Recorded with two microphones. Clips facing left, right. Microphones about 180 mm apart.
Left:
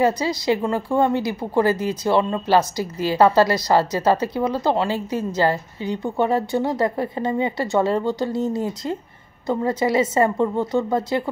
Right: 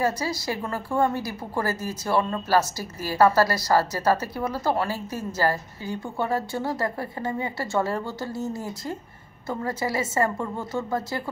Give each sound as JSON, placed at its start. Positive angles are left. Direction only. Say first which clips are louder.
{"t": 0.0, "sound": "a woman's voice", "louder": "left 6 dB", "side_deg": 20}